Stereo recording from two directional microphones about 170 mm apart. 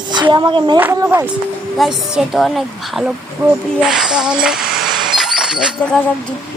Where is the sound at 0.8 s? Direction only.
15° right (ahead or behind).